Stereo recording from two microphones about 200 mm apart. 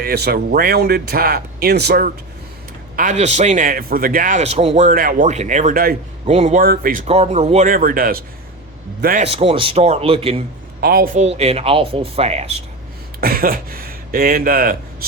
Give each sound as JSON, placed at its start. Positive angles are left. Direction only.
{"t": 0.0, "sound": "speech", "side_deg": -50}
{"t": 2.9, "sound": "a man's voice", "side_deg": -40}
{"t": 6.2, "sound": "a man's voice", "side_deg": -35}
{"t": 7.1, "sound": "a man's voice", "side_deg": -35}
{"t": 9.2, "sound": "speech", "side_deg": -30}
{"t": 10.8, "sound": "a man's voice", "side_deg": -50}
{"t": 13.2, "sound": "speech", "side_deg": -45}